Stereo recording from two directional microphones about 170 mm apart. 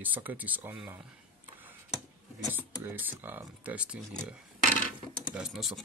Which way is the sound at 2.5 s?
10° right (ahead or behind).